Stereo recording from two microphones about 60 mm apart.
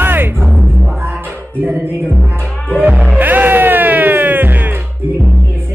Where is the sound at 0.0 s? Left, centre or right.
Right.